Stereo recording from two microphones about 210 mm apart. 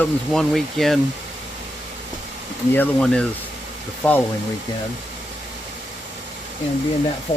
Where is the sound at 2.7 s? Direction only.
5° left (ahead or behind).